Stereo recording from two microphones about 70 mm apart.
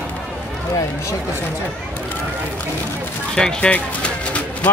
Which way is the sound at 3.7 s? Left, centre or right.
Centre.